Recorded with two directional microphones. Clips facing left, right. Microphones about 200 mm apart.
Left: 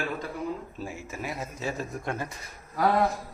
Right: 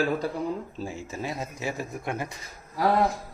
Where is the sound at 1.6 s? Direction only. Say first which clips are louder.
Even; 10° right (ahead or behind).